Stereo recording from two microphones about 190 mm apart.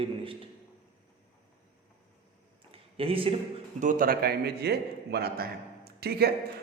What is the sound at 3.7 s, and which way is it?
A man's voice, 45° right (ahead or behind).